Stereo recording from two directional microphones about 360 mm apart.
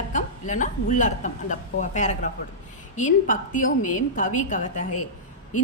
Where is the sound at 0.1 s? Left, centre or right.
Left.